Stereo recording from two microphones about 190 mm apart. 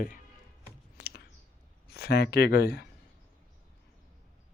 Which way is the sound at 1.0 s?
55° left (ahead or behind).